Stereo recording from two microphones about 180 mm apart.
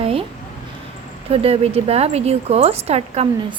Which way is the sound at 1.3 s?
35° right (ahead or behind).